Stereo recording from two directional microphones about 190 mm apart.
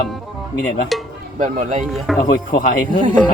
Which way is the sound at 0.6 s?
Centre (ahead or behind).